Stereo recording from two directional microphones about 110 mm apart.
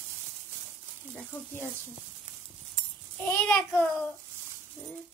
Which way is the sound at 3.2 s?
15° left (ahead or behind).